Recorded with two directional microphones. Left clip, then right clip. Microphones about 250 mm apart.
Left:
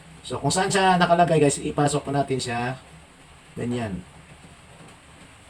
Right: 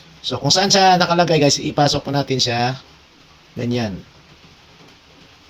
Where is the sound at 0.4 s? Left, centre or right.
Right.